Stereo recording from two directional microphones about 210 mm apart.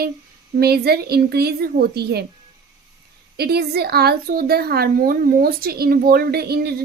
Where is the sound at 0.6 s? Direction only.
50° right (ahead or behind).